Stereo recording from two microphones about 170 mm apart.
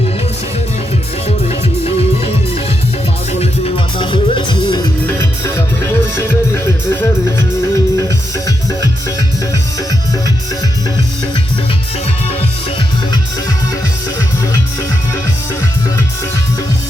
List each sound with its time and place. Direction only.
1.5 s music: 35° left (ahead or behind)
3.9 s music: 30° left (ahead or behind)
5.0 s music: 15° left (ahead or behind)